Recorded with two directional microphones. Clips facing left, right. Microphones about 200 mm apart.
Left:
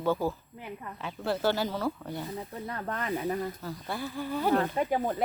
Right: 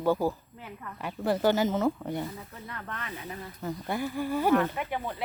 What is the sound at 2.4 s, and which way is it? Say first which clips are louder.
Speech: left 6 dB; 35° left (ahead or behind).